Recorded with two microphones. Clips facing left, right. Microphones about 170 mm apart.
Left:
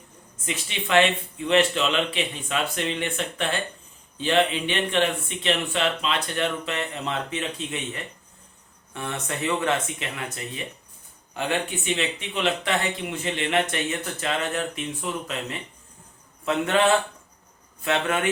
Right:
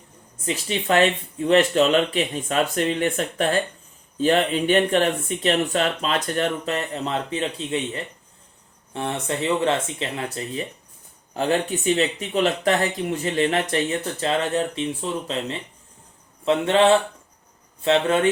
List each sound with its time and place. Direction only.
0.4 s speech: 35° right (ahead or behind)